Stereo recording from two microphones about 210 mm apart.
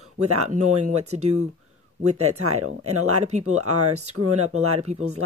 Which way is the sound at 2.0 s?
90° right.